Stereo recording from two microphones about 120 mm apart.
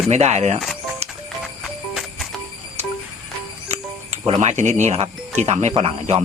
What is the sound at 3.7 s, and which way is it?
Speech, 60° right (ahead or behind).